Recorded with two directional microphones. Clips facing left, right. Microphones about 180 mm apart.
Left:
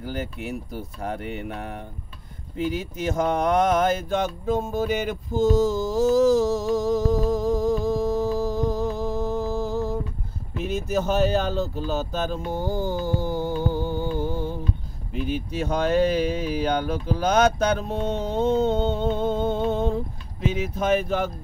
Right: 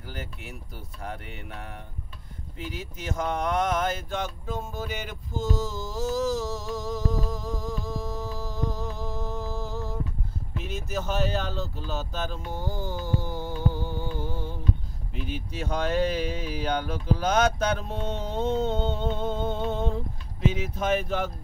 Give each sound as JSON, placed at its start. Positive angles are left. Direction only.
{"t": 0.0, "sound": "speech", "side_deg": 15}
{"t": 1.5, "sound": "a sound", "side_deg": 60}
{"t": 2.5, "sound": "speech", "side_deg": 15}
{"t": 3.2, "sound": "a sound", "side_deg": 60}
{"t": 5.0, "sound": "mantra", "side_deg": 45}
{"t": 10.6, "sound": "a sound", "side_deg": 50}
{"t": 15.1, "sound": "speech", "side_deg": 10}
{"t": 15.6, "sound": "speech", "side_deg": 45}
{"t": 16.3, "sound": "speech", "side_deg": 10}
{"t": 16.5, "sound": "speech", "side_deg": 50}